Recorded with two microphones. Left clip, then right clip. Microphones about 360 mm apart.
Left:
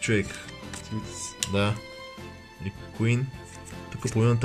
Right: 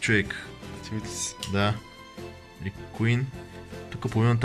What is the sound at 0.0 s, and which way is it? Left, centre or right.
Speech, centre.